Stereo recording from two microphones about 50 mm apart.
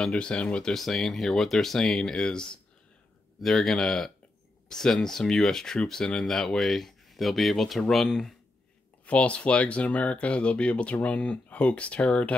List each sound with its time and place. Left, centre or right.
0.1 s speech: left
0.7 s speech: centre
9.0 s speech: left